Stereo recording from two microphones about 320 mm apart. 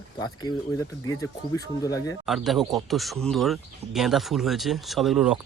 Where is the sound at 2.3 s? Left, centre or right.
Centre.